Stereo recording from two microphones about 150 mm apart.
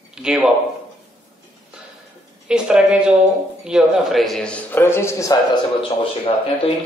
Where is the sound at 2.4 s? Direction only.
5° right (ahead or behind); by 5.4 s 15° left (ahead or behind).